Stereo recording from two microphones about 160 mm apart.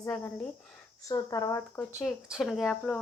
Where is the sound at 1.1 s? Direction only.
25° left (ahead or behind).